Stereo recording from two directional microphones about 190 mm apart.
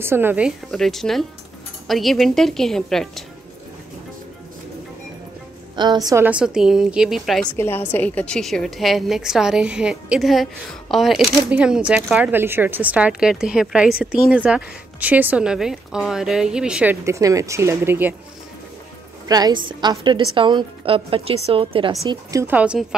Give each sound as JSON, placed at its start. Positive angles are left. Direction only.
{"t": 0.0, "sound": "a woman's voice", "side_deg": -10}
{"t": 0.7, "sound": "a woman's voice", "side_deg": 0}
{"t": 5.8, "sound": "a woman's voice", "side_deg": -20}
{"t": 6.2, "sound": "a woman's voice", "side_deg": -5}
{"t": 7.5, "sound": "a woman's voice", "side_deg": 10}
{"t": 19.2, "sound": "a woman's voice", "side_deg": -20}
{"t": 22.1, "sound": "a woman's voice", "side_deg": -15}